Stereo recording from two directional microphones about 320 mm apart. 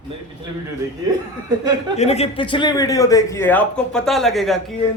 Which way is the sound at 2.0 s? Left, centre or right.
Centre.